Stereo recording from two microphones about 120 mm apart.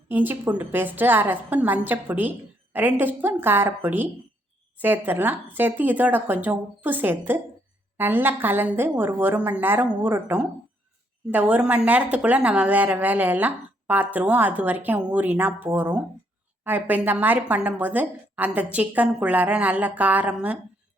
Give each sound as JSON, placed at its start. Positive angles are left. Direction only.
{"t": 0.1, "sound": "a woman's voice", "side_deg": -15}